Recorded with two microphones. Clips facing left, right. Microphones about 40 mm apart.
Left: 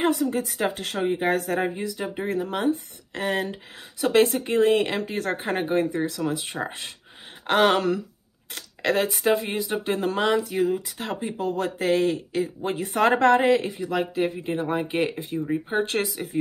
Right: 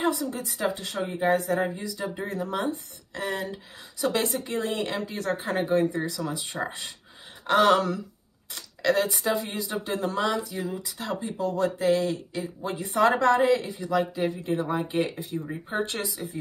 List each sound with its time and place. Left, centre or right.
0.0 s a woman's voice: left
2.7 s a woman's voice: left